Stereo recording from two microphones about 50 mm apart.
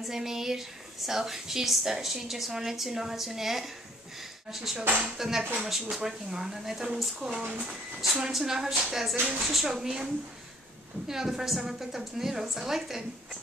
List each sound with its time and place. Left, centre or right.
0.0 s a woman's voice: centre
7.4 s speech: right
8.0 s a woman's voice: centre